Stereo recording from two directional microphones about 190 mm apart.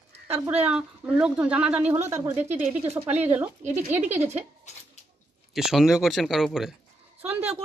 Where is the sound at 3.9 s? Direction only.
10° right (ahead or behind).